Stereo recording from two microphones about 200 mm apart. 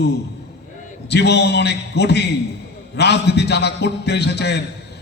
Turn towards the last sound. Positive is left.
turn(degrees=55)  # may be behind; listen again after turning